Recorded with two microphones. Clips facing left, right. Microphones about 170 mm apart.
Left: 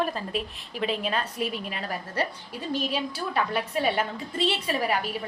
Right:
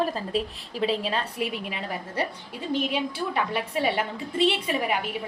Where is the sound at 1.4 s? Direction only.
30° left (ahead or behind).